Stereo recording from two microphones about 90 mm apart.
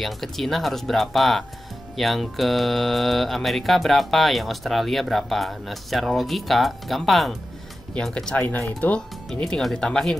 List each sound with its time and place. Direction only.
0.0 s speech: centre (ahead or behind)
8.5 s speech: 20° left (ahead or behind)
9.3 s speech: 5° left (ahead or behind)